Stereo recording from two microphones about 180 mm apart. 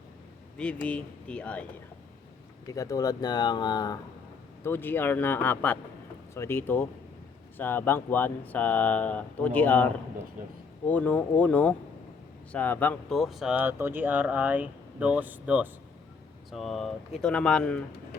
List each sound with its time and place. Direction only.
0.5 s speech: 5° left (ahead or behind)
2.6 s speech: 20° left (ahead or behind)
4.6 s speech: 10° left (ahead or behind)